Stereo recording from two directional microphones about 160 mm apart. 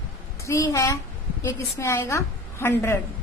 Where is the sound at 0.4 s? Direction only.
20° left (ahead or behind).